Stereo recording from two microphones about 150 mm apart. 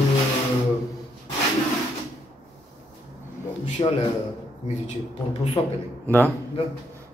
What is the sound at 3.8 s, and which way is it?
Speech, 35° left (ahead or behind).